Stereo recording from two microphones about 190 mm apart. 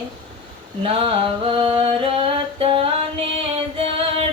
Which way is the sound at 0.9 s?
30° right (ahead or behind).